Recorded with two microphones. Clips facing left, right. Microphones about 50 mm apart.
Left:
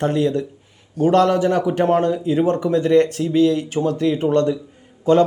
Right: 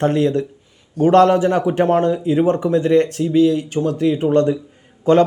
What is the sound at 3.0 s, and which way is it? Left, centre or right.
Speech, centre.